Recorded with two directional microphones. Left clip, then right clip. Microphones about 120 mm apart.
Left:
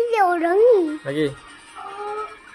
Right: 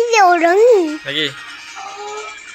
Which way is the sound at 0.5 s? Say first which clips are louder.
Right 4 dB; centre (ahead or behind).